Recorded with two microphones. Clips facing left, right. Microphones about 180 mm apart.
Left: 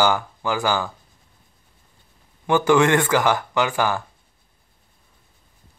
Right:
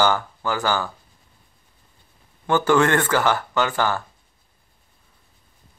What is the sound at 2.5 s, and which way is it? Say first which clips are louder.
Speech: left 1 dB; 15° left (ahead or behind).